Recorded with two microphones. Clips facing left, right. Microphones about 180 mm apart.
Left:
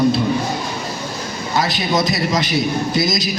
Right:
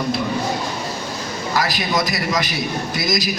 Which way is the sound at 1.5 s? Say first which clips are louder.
Left 3 dB; 25° left (ahead or behind).